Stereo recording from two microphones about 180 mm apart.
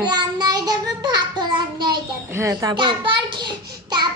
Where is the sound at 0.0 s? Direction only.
25° right (ahead or behind).